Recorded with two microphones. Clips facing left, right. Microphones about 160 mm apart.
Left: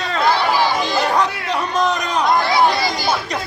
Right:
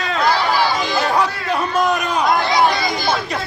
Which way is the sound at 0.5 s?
15° left (ahead or behind).